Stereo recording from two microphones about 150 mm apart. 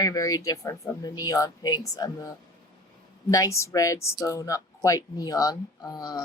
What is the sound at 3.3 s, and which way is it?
Speech, 20° left (ahead or behind).